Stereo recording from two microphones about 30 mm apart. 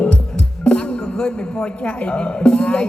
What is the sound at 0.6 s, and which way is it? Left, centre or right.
A man's voice, left.